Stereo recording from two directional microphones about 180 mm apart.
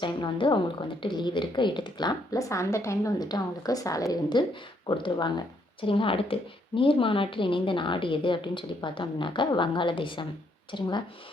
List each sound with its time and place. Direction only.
0.0 s a woman's voice: 25° left (ahead or behind)